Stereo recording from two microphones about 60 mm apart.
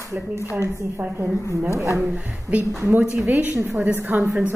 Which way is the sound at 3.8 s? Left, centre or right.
Right.